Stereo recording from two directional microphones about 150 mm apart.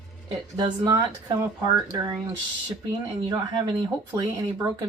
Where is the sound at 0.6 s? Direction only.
25° right (ahead or behind).